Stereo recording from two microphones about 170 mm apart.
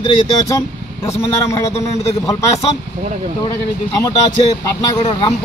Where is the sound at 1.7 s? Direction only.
40° left (ahead or behind).